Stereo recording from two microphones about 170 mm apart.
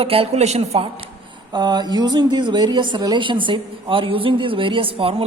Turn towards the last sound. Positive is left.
turn(degrees=-35)  # may be behind; listen again after turning